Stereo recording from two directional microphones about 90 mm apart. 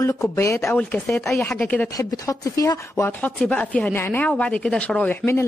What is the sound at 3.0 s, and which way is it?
A woman's voice, 20° left (ahead or behind).